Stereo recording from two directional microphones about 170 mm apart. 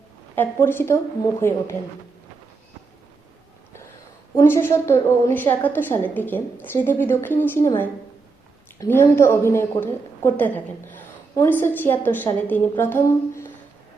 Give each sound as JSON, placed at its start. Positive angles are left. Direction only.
{"t": 0.3, "sound": "a woman's voice", "side_deg": 15}
{"t": 4.4, "sound": "a woman's voice", "side_deg": 15}
{"t": 8.8, "sound": "a woman's voice", "side_deg": 15}